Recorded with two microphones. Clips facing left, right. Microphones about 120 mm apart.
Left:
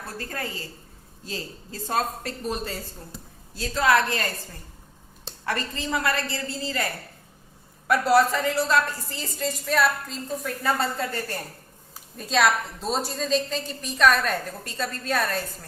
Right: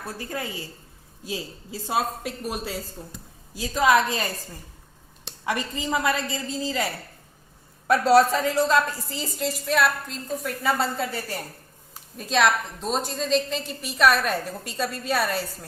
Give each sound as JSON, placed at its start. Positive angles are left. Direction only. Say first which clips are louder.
{"t": 0.0, "sound": "a woman's voice", "louder": "right 1 dB", "side_deg": -15}
{"t": 5.5, "sound": "a woman's voice", "louder": "right 2 dB", "side_deg": -15}
{"t": 8.3, "sound": "a woman's voice", "louder": "right 2 dB", "side_deg": -20}
{"t": 12.1, "sound": "a woman's voice", "louder": "even", "side_deg": 0}